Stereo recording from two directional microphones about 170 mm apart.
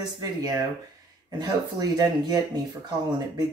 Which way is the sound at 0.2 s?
20° right (ahead or behind).